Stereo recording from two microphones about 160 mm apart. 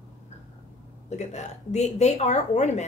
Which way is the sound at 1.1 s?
45° left (ahead or behind).